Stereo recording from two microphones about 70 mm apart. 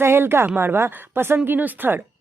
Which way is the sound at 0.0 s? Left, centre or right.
Right.